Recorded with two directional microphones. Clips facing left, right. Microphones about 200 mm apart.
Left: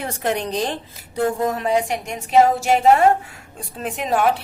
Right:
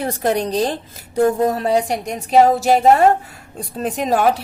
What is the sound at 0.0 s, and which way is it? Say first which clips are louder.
A woman's voice: right 4 dB; 35° right (ahead or behind).